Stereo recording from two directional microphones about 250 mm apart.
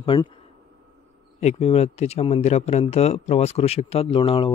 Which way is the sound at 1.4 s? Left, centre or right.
Left.